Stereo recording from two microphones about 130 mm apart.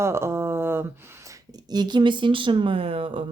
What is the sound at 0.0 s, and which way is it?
Speech, 20° right (ahead or behind).